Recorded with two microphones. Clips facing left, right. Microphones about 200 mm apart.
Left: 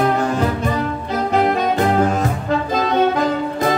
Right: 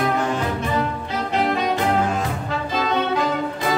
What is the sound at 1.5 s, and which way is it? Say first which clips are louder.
Music: left 4 dB; 45° left (ahead or behind).